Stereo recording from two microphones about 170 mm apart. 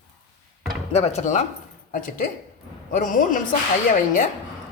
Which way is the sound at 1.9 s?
55° left (ahead or behind).